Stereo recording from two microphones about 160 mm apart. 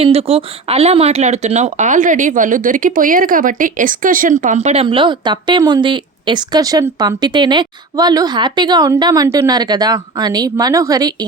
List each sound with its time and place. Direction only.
0.0 s speech: 40° right (ahead or behind); by 11.3 s 25° right (ahead or behind)